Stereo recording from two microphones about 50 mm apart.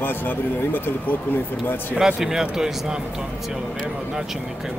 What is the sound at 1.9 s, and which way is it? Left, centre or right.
Speech, centre.